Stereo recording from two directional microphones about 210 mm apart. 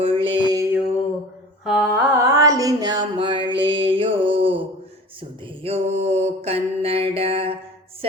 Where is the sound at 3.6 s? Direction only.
25° right (ahead or behind).